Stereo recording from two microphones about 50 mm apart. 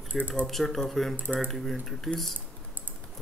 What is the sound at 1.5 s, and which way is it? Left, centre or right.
Speech, centre.